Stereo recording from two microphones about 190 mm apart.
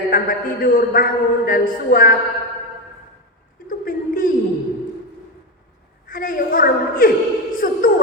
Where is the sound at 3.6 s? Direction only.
45° left (ahead or behind).